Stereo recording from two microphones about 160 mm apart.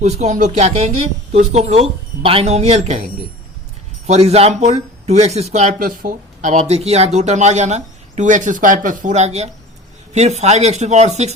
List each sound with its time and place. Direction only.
0.0 s speech: 45° right (ahead or behind)
4.0 s speech: 40° right (ahead or behind)